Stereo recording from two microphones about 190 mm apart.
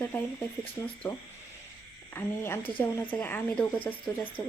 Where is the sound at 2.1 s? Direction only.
10° left (ahead or behind).